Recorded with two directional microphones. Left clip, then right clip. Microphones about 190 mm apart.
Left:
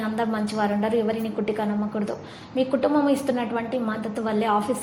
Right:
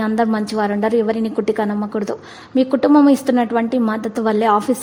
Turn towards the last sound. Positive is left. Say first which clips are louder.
# right 8 dB
turn(degrees=-40)  # may be behind; listen again after turning